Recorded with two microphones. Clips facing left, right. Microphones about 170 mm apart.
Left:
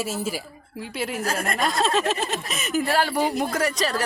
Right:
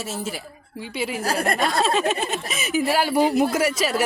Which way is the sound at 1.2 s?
35° right (ahead or behind).